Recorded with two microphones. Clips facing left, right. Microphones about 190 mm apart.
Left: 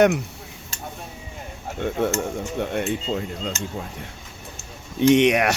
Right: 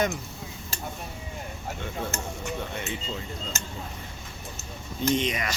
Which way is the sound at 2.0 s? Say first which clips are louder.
Left 11 dB; 70° left (ahead or behind).